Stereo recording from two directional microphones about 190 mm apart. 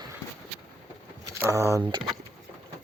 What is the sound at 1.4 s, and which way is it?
Speech, 15° right (ahead or behind).